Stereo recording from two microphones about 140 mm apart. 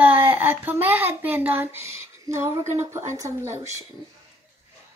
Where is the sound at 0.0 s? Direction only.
15° right (ahead or behind).